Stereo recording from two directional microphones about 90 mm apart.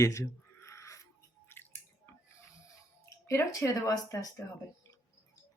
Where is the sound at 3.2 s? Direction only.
35° left (ahead or behind).